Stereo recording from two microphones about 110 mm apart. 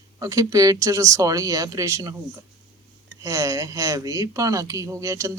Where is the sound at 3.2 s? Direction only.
30° right (ahead or behind).